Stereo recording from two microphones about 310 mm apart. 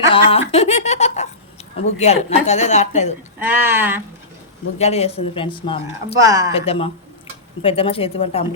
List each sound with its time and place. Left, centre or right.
0.1 s speech: centre
3.4 s speech: centre
4.8 s speech: centre
6.1 s speech: centre
6.5 s speech: centre